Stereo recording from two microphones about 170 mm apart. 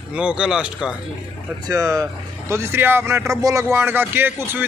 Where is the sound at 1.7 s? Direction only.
20° right (ahead or behind).